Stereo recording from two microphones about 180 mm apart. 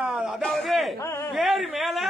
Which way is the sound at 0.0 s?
5° right (ahead or behind).